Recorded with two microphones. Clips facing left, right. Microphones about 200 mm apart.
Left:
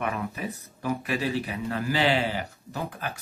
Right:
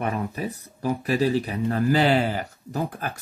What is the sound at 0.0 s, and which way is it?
Speech, 35° right (ahead or behind).